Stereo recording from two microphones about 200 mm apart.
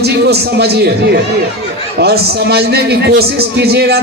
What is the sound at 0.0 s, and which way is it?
Speech, 55° right (ahead or behind).